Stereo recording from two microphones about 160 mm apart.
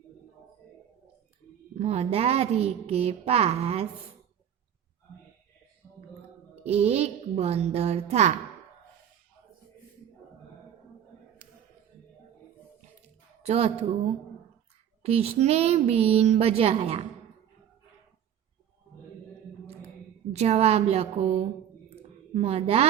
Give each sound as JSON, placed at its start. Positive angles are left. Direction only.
{"t": 1.7, "sound": "a woman's voice", "side_deg": -40}
{"t": 6.7, "sound": "a woman's voice", "side_deg": -40}
{"t": 11.4, "sound": "a sound", "side_deg": -60}
{"t": 13.4, "sound": "a woman's voice", "side_deg": -40}
{"t": 20.3, "sound": "a woman's voice", "side_deg": -45}